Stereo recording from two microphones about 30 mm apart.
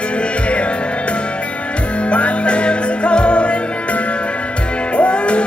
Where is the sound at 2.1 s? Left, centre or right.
Left.